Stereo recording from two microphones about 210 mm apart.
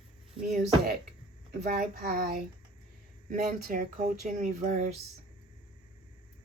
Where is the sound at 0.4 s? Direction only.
45° right (ahead or behind).